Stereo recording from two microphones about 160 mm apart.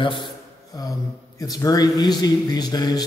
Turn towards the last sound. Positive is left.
turn(degrees=25)  # may be behind; listen again after turning